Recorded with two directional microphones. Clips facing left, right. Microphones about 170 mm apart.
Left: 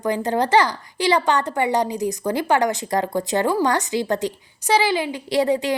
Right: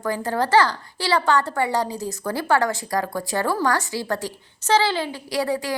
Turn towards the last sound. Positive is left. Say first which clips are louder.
# left 5 dB
turn(degrees=20)  # may be behind; listen again after turning